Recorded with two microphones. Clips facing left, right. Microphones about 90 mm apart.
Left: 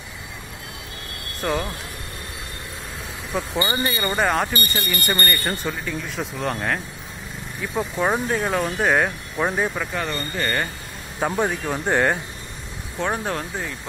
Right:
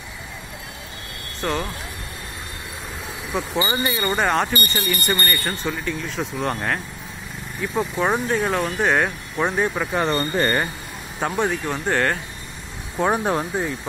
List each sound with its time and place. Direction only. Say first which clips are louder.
1.4 s speech: even; 5° left (ahead or behind)
3.3 s speech: right 1 dB; 10° right (ahead or behind)
9.9 s speech: right 6 dB; 35° right (ahead or behind)
10.4 s speech: even; 15° right (ahead or behind)
11.1 s speech: even; 5° left (ahead or behind)
12.9 s speech: right 5 dB; 20° right (ahead or behind)